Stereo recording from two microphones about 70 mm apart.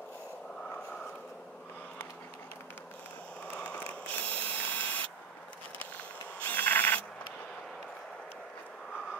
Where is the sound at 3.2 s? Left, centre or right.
Centre.